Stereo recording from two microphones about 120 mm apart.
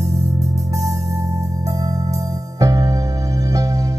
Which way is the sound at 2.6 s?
30° right (ahead or behind).